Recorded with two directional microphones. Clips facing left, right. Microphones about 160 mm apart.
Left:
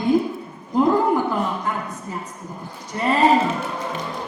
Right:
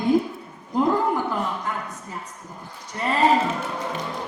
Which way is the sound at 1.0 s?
25° left (ahead or behind).